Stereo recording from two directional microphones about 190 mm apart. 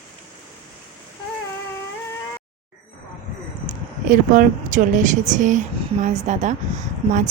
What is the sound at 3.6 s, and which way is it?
Speech, 45° right (ahead or behind).